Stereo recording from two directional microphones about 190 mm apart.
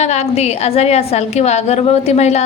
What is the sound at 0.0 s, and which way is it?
A woman's voice, 35° left (ahead or behind).